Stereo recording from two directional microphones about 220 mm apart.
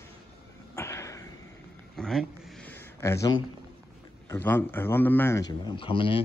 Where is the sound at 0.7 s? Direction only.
10° left (ahead or behind).